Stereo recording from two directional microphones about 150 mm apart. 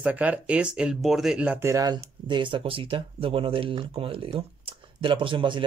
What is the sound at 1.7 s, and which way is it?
Speech, 25° right (ahead or behind).